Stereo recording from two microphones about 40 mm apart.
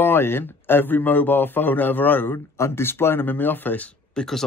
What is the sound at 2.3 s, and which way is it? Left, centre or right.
Speech, left.